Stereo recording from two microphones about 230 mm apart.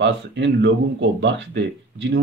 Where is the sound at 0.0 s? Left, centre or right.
Right.